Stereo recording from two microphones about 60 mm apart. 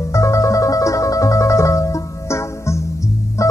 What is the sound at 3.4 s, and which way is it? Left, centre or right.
Music, left.